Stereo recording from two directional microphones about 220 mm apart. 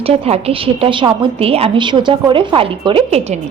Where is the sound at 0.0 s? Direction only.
25° right (ahead or behind).